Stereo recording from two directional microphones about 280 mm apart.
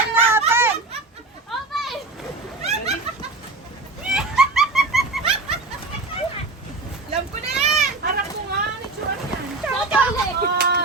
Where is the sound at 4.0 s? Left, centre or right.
Centre.